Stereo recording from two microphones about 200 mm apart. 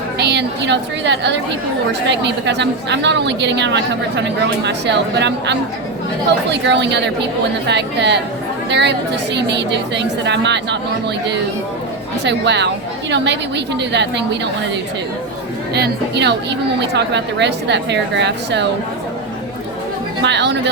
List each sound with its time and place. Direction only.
0.2 s a woman's voice: 55° right (ahead or behind)
12.2 s a woman's voice: 60° right (ahead or behind)
15.7 s a woman's voice: 55° right (ahead or behind)
20.2 s a woman's voice: 60° right (ahead or behind)